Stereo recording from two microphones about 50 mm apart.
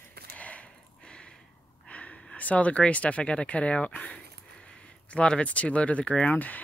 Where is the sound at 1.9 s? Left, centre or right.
Left.